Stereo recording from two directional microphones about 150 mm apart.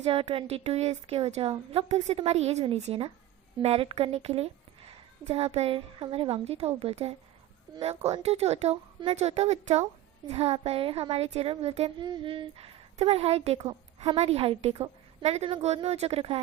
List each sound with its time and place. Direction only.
0.0 s a woman's voice: 40° right (ahead or behind)
11.9 s a woman's voice: 30° right (ahead or behind)